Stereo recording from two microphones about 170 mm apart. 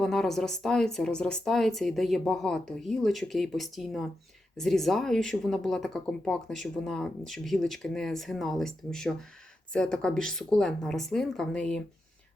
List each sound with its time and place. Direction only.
0.0 s speech: 5° left (ahead or behind)